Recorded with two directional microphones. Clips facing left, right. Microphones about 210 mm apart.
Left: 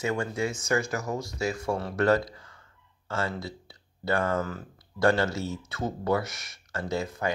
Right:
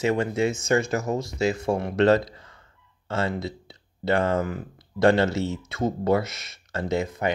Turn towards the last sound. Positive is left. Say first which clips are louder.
# right 4 dB
turn(degrees=-20)  # may be behind; listen again after turning